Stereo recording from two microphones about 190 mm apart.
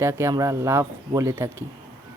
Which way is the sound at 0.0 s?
15° right (ahead or behind).